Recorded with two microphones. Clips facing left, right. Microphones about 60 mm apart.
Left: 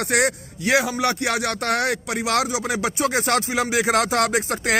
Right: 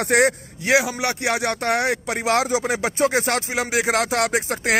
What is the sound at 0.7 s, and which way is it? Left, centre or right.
Speech, centre.